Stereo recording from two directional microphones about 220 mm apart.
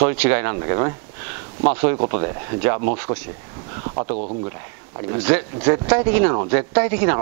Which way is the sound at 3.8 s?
25° right (ahead or behind).